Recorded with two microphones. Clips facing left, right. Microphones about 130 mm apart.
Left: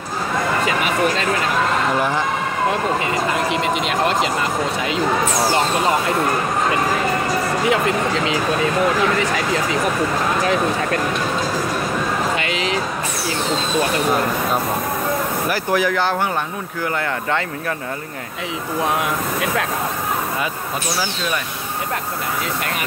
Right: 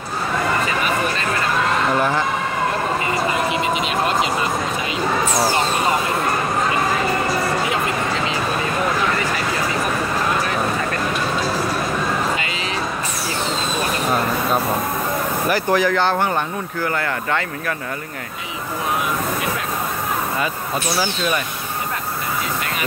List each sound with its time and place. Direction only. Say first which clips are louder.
0.7 s a sound: left 2 dB; 90° left
12.4 s vehicle: left 4 dB; 90° left
15.5 s speech: right 2 dB; 5° left (ahead or behind)
16.8 s speech: left 1 dB; 20° left (ahead or behind)